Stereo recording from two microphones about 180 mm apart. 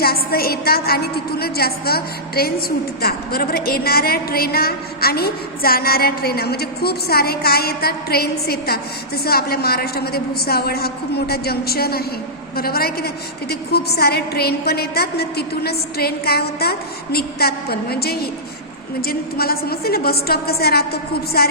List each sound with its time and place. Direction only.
0.0 s a woman's voice: 60° left (ahead or behind)